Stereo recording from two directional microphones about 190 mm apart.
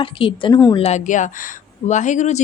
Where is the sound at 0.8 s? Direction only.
35° left (ahead or behind).